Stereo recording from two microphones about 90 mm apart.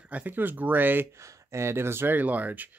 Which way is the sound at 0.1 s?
20° right (ahead or behind).